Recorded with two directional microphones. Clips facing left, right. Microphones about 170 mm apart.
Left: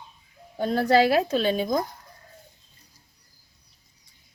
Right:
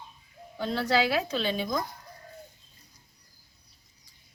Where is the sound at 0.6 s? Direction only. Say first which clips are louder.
Left 6 dB; 45° left (ahead or behind).